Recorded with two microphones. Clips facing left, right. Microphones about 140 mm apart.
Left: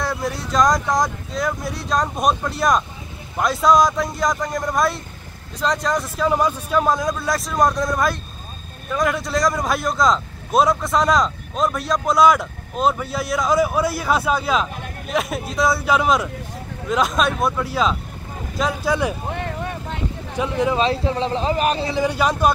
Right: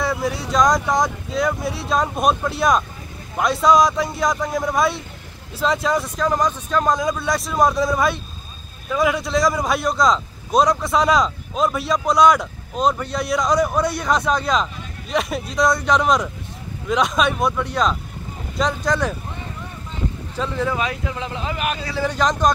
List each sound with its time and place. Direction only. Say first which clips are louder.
0.0 s speech: right 2 dB; centre (ahead or behind)
19.2 s vehicle: left 7 dB; 70° left (ahead or behind)
20.3 s speech: left 3 dB; 15° left (ahead or behind)
20.8 s speech: left 6 dB; 30° left (ahead or behind)
22.0 s speech: right 1 dB; 10° left (ahead or behind)